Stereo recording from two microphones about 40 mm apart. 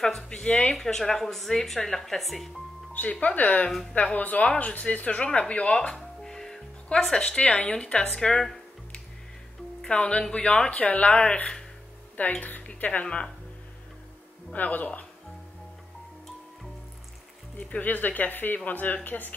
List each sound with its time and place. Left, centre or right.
0.4 s speech: left
0.7 s a woman's voice: centre
2.9 s speech: left
5.9 s music: centre
7.0 s a woman's voice: centre
7.2 s speech: left
8.1 s a woman's voice: centre
9.8 s speech: left
12.4 s speech: left
13.0 s speech: left
14.5 s speech: left
17.6 s speech: left